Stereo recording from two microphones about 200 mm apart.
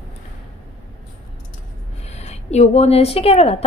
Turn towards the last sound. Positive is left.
turn(degrees=30)  # may be behind; listen again after turning